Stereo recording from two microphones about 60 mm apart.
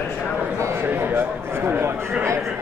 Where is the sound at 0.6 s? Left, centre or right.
Right.